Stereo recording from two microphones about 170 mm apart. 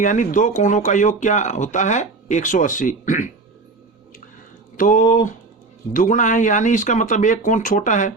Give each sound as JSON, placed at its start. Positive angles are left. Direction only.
{"t": 0.0, "sound": "speech", "side_deg": 50}
{"t": 4.8, "sound": "speech", "side_deg": 50}